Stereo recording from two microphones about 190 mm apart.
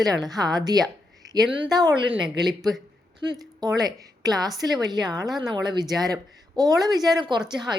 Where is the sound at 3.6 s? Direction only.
20° right (ahead or behind).